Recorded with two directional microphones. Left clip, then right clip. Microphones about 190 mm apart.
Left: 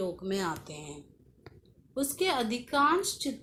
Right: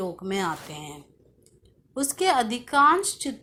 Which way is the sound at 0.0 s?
20° right (ahead or behind).